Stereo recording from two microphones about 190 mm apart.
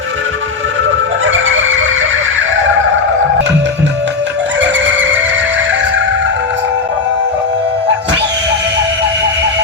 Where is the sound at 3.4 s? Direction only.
65° right (ahead or behind).